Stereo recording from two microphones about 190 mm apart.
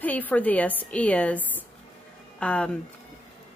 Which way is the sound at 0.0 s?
10° left (ahead or behind).